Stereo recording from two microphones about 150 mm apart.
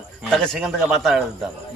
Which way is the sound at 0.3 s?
5° left (ahead or behind).